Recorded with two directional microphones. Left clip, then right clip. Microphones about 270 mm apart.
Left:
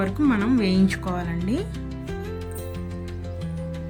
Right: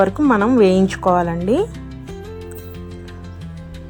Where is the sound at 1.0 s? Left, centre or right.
Right.